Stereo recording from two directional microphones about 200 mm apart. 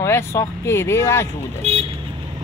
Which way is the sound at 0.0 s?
15° left (ahead or behind).